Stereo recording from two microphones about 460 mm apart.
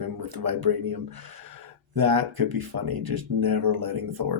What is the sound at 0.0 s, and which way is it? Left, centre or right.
Speech, right.